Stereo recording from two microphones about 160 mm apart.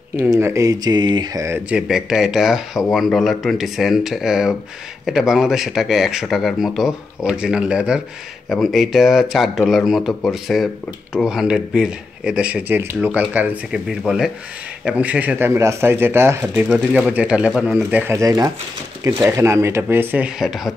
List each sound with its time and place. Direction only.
0.1 s speech: 15° right (ahead or behind)
1.7 s speech: 5° right (ahead or behind)
16.6 s speech: 5° right (ahead or behind)